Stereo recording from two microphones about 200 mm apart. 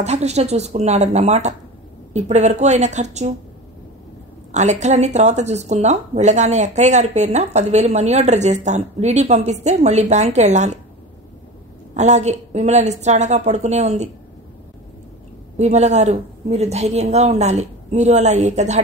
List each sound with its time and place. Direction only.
0.0 s speech: 35° right (ahead or behind)
4.5 s speech: 35° right (ahead or behind)
11.9 s speech: 35° right (ahead or behind)
15.5 s speech: 35° right (ahead or behind)